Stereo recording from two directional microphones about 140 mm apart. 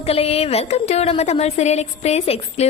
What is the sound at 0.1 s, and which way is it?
A woman's voice, 45° left (ahead or behind).